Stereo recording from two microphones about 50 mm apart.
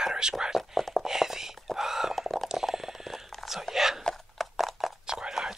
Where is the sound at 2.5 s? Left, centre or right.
Centre.